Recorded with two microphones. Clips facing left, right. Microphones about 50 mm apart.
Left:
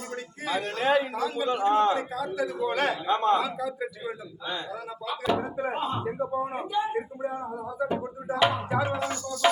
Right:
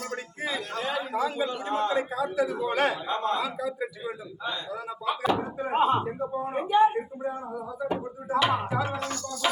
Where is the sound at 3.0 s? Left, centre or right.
Left.